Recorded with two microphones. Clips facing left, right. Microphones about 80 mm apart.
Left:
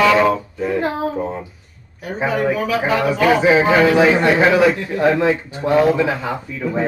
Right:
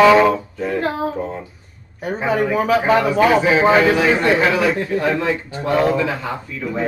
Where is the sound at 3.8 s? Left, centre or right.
Left.